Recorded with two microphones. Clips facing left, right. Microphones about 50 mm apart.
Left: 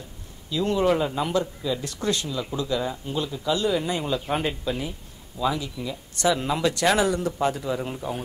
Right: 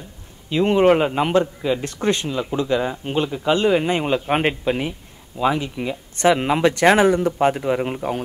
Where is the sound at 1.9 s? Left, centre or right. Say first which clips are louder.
Right 5 dB; right.